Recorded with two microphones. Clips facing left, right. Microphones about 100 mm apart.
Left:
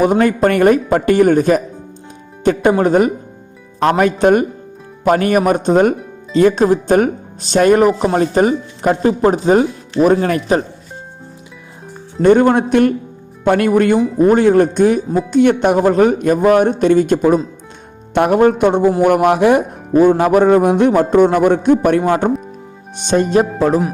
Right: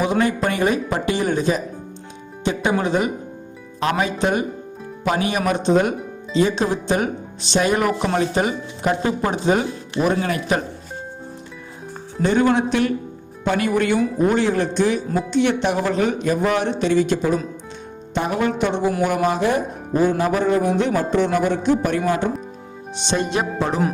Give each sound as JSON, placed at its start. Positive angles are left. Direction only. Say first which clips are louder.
{"t": 0.0, "sound": "speech", "louder": "left 7 dB", "side_deg": 50}
{"t": 12.2, "sound": "speech", "louder": "left 7 dB", "side_deg": 50}
{"t": 19.0, "sound": "speech", "louder": "left 9 dB", "side_deg": 60}